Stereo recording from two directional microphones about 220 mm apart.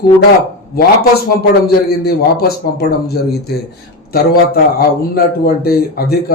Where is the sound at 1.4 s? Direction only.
45° left (ahead or behind).